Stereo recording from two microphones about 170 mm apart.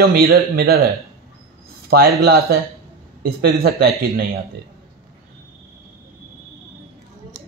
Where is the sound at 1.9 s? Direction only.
65° right (ahead or behind).